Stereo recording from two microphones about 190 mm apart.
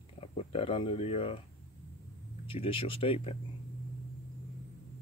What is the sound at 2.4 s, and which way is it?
Speech, 30° left (ahead or behind).